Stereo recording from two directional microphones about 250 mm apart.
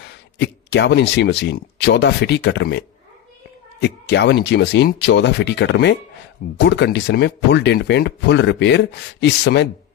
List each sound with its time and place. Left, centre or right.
0.4 s speech: left
3.8 s speech: left